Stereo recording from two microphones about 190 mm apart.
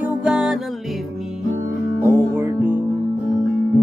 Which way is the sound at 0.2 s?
5° right (ahead or behind).